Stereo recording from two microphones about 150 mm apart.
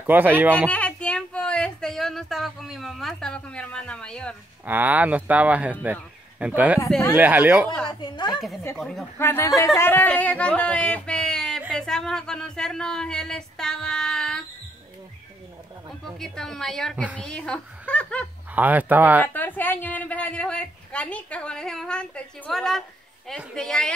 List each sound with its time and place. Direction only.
0.0 s speech: 15° right (ahead or behind)
0.7 s speech: 10° left (ahead or behind)
4.6 s speech: 10° right (ahead or behind)
8.0 s a woman's voice: 30° left (ahead or behind)
8.7 s speech: centre (ahead or behind)
9.2 s a woman's voice: 15° left (ahead or behind)
16.2 s speech: 5° left (ahead or behind)
16.9 s speech: 10° right (ahead or behind)
17.2 s a woman's voice: 5° left (ahead or behind)
18.5 s speech: 10° right (ahead or behind)
19.2 s a woman's voice: 10° left (ahead or behind)